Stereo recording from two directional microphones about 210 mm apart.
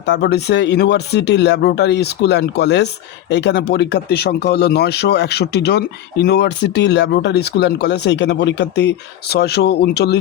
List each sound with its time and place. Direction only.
0.0 s speech: 55° left (ahead or behind)